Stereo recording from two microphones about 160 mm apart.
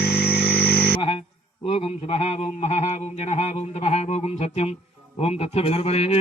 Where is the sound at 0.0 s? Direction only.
85° left.